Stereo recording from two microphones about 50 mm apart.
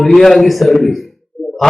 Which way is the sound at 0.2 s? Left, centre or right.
Centre.